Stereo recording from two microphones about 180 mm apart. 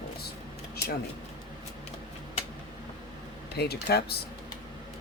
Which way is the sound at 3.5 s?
60° left (ahead or behind).